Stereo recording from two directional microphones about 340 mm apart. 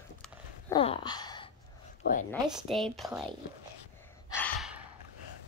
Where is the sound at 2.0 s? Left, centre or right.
Left.